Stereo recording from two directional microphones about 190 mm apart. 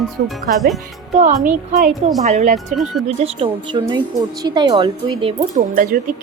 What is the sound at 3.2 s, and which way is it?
Speech, 30° right (ahead or behind).